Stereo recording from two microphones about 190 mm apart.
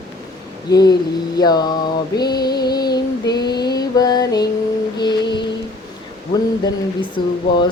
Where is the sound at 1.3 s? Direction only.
20° left (ahead or behind).